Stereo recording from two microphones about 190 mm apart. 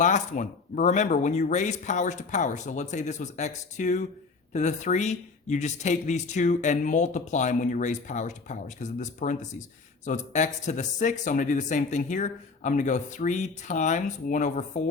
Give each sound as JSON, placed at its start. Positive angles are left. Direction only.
{"t": 0.0, "sound": "speech", "side_deg": 40}